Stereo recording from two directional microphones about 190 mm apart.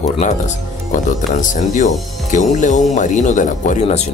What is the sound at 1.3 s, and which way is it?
Speech, 40° left (ahead or behind).